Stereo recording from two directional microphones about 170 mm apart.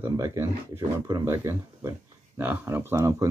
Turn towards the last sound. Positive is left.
turn(degrees=-15)  # may be behind; listen again after turning